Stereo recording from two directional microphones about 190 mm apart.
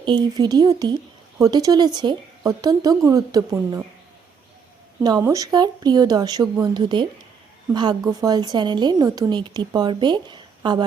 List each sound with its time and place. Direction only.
0.0 s a woman's voice: 25° right (ahead or behind)
5.0 s a woman's voice: 20° right (ahead or behind)